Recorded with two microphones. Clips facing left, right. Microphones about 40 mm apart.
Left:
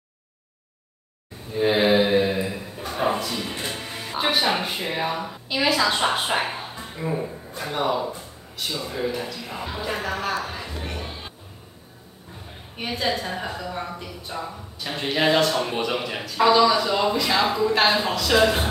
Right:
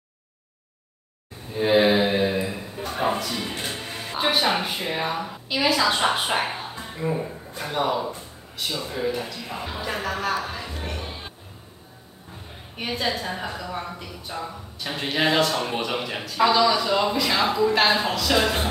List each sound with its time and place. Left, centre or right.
1.5 s mantra: centre
3.0 s a sound: centre
3.6 s a woman's voice: centre
10.3 s music: centre
12.7 s a woman's voice: centre